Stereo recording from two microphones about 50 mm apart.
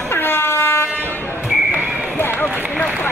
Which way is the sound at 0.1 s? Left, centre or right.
Left.